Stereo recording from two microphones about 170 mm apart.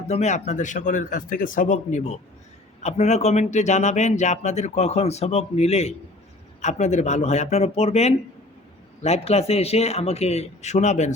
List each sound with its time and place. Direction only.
0.1 s speech: 40° left (ahead or behind)